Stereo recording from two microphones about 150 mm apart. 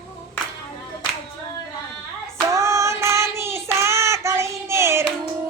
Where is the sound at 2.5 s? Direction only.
20° right (ahead or behind).